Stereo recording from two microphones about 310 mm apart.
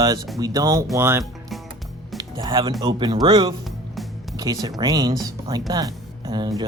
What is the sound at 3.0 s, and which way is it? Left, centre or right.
Speech, centre.